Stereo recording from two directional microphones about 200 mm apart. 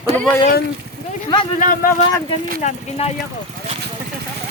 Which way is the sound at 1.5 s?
45° left (ahead or behind).